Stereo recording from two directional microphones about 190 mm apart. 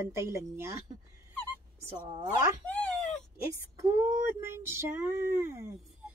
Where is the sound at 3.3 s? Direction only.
15° right (ahead or behind).